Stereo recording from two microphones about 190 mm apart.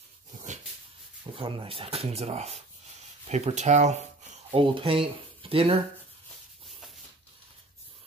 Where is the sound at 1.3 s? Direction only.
30° right (ahead or behind).